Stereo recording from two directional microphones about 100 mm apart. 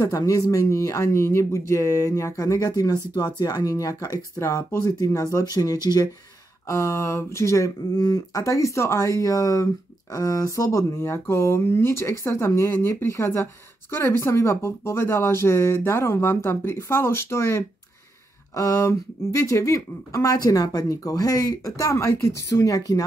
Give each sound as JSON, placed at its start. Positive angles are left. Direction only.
{"t": 0.1, "sound": "speech", "side_deg": 40}
{"t": 4.4, "sound": "speech", "side_deg": 25}
{"t": 6.7, "sound": "speech", "side_deg": 30}